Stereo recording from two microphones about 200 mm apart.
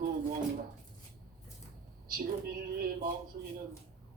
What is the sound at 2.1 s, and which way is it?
A woman's voice, 45° right (ahead or behind).